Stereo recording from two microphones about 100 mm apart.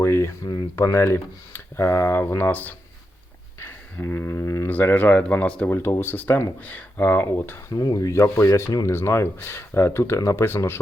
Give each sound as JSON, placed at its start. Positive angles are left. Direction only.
{"t": 0.0, "sound": "speech", "side_deg": 30}
{"t": 4.7, "sound": "speech", "side_deg": 20}
{"t": 7.7, "sound": "speech", "side_deg": 40}